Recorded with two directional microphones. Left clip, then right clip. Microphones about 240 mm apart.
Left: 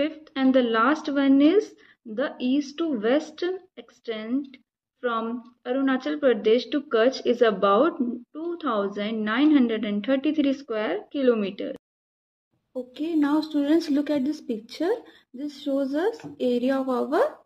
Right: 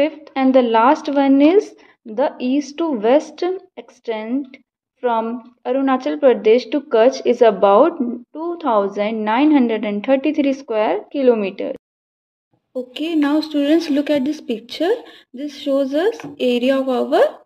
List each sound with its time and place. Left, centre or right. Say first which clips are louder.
0.0 s a woman's voice: right 8 dB; centre